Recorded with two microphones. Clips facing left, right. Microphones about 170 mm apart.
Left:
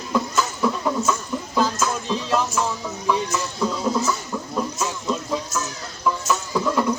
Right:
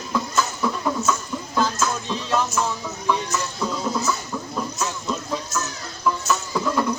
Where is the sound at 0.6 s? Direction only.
5° left (ahead or behind).